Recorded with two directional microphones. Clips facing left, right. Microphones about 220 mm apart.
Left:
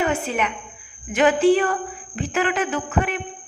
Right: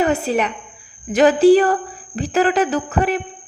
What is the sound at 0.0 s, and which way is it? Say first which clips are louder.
A woman's voice: right 5 dB; 35° right (ahead or behind).